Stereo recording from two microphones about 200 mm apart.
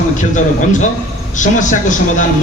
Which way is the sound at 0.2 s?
40° left (ahead or behind).